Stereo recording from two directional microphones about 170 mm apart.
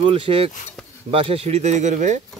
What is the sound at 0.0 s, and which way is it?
Speech, 30° right (ahead or behind).